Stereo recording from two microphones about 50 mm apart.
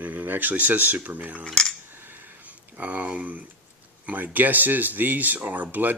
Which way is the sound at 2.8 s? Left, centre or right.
Right.